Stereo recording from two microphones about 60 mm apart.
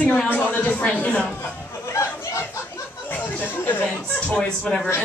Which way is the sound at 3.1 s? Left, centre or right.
Left.